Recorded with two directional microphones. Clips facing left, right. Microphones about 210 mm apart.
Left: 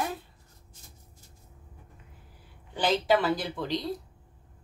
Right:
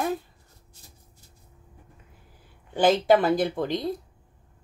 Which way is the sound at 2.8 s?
50° right (ahead or behind).